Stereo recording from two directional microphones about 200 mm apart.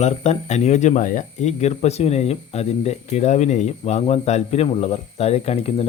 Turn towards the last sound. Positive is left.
turn(degrees=30)  # may be behind; listen again after turning